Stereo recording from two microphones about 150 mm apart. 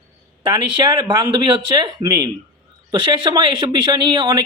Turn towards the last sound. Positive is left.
turn(degrees=-30)  # may be behind; listen again after turning